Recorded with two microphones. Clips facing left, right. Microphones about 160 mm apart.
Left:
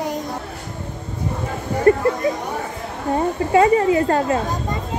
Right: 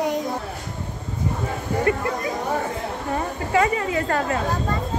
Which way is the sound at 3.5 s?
25° left (ahead or behind).